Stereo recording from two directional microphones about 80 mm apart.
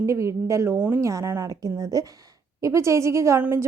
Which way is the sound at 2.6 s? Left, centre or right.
Right.